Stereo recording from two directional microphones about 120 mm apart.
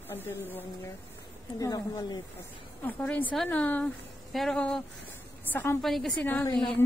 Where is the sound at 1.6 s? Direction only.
30° left (ahead or behind).